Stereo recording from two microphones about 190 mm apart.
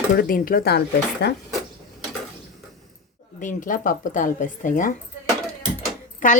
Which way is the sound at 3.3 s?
45° left (ahead or behind).